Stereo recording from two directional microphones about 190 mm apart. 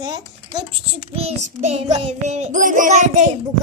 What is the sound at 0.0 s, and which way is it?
Speech, 20° right (ahead or behind).